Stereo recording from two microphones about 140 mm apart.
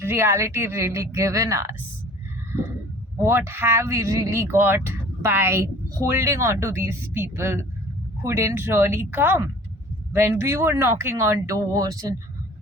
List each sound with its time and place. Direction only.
0.0 s speech: 15° right (ahead or behind)
3.2 s speech: 15° right (ahead or behind)